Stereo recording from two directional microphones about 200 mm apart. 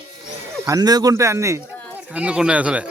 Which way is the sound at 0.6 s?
20° right (ahead or behind).